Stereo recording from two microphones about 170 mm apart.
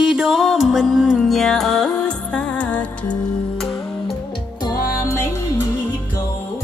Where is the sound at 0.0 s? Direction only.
5° right (ahead or behind).